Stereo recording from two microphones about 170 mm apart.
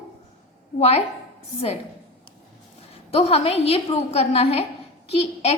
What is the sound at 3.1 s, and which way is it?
A woman's voice, 35° left (ahead or behind).